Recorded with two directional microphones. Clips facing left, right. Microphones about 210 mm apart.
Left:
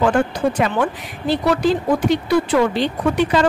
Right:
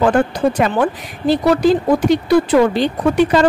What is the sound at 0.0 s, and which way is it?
Speech, 40° right (ahead or behind).